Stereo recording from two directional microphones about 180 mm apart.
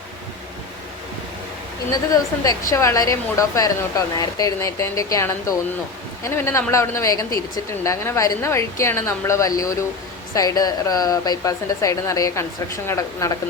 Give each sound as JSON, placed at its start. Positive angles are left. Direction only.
{"t": 2.4, "sound": "a woman's voice", "side_deg": 20}